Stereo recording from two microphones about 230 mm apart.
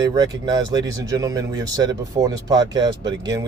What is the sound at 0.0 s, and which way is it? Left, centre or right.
Speech, centre.